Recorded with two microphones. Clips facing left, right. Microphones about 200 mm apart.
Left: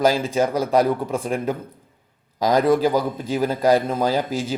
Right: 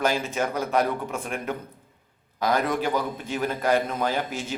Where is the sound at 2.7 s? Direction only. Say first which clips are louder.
Left 7 dB; 35° left (ahead or behind).